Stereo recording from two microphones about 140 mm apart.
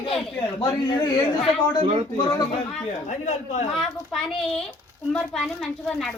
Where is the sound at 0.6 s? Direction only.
30° left (ahead or behind).